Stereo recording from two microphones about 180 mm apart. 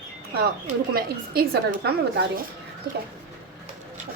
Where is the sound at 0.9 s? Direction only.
55° right (ahead or behind).